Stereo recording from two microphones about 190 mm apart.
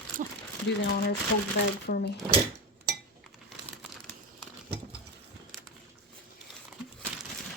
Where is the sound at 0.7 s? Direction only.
70° left (ahead or behind).